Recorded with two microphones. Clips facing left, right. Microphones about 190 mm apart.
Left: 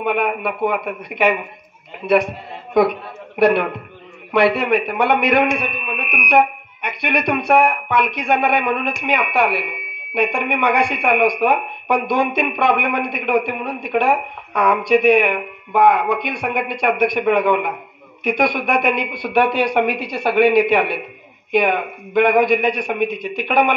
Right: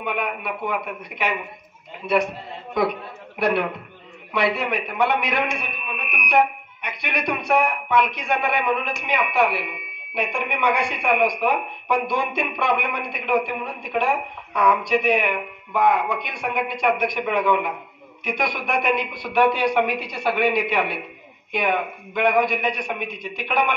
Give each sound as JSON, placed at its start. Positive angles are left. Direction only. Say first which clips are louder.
{"t": 0.0, "sound": "speech", "louder": "left 7 dB", "side_deg": 55}
{"t": 3.3, "sound": "speech", "louder": "left 7 dB", "side_deg": 60}